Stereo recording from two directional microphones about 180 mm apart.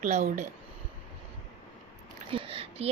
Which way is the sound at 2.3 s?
30° right (ahead or behind).